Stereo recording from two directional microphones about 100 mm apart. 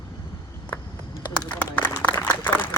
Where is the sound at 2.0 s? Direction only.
20° left (ahead or behind).